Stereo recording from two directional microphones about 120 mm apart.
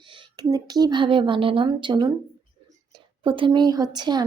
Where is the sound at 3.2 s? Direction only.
45° right (ahead or behind).